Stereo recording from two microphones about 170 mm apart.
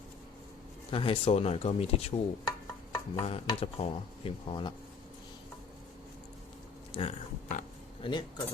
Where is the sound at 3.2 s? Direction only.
35° left (ahead or behind).